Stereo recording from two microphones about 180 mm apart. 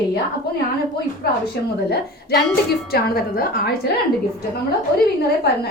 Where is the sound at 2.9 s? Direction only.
55° left (ahead or behind).